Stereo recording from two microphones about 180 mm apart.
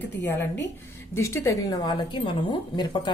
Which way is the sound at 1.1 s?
15° left (ahead or behind).